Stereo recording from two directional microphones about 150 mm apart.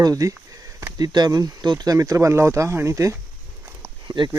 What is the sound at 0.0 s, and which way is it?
Speech, 25° right (ahead or behind).